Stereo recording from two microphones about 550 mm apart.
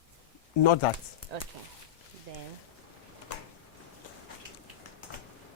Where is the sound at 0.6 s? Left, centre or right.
Left.